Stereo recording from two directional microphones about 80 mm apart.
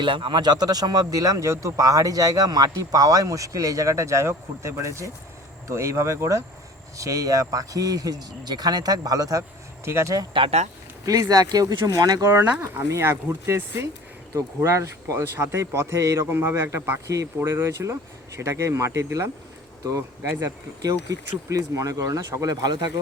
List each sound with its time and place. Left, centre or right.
0.0 s speech: right
9.8 s speech: right
11.0 s speech: right
12.6 s speech: right
22.6 s speech: right